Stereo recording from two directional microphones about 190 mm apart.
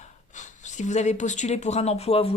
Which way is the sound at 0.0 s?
40° left (ahead or behind).